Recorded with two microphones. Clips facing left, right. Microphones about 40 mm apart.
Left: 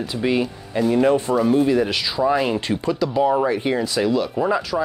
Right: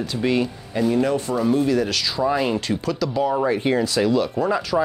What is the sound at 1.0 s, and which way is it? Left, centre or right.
Speech, left.